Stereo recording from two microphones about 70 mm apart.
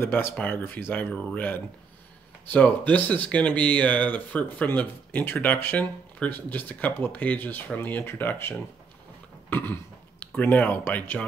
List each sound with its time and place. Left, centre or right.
0.0 s speech: left
10.2 s speech: left